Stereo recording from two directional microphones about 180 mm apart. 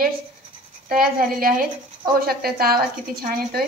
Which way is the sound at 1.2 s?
50° right (ahead or behind).